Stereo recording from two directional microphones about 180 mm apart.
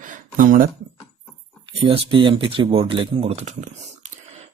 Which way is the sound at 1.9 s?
30° right (ahead or behind).